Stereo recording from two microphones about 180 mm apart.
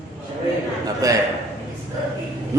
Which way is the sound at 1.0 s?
20° right (ahead or behind).